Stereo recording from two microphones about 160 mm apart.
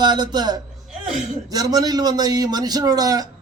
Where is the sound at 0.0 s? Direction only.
25° right (ahead or behind).